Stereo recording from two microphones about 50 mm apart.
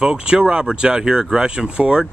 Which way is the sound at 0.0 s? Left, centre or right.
Centre.